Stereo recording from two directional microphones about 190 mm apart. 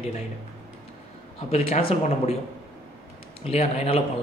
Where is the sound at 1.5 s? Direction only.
30° left (ahead or behind).